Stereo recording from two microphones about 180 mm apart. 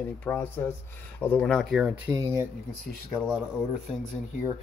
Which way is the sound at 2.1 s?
15° right (ahead or behind).